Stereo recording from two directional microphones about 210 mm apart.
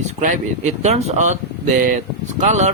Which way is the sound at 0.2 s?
35° right (ahead or behind).